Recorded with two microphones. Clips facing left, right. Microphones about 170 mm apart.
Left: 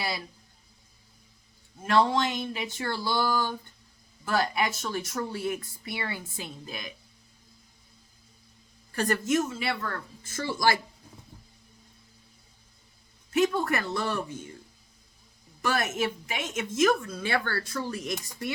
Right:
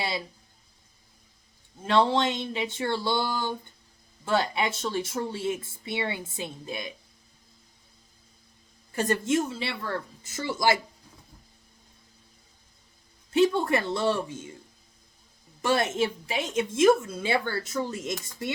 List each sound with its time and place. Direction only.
1.8 s speech: 30° right (ahead or behind)
8.9 s speech: 20° right (ahead or behind)
13.3 s speech: 30° right (ahead or behind)
15.6 s speech: 25° right (ahead or behind)